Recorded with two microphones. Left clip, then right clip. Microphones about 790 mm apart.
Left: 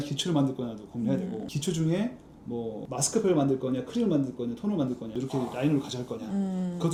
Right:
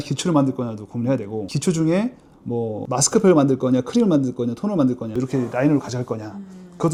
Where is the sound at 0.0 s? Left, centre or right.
Right.